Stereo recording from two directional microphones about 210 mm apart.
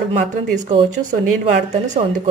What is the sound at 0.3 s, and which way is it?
Speech, 35° right (ahead or behind).